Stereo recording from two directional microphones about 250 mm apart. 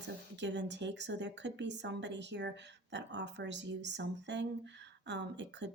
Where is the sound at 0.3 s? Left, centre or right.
Right.